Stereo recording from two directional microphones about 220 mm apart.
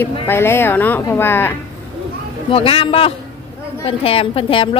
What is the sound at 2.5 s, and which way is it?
A woman's voice, 25° left (ahead or behind).